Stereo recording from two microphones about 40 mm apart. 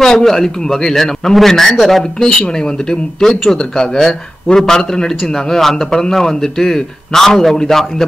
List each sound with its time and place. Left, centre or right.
0.0 s speech: centre
2.2 s speech: left